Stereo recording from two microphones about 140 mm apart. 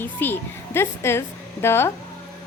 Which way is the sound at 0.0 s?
15° left (ahead or behind).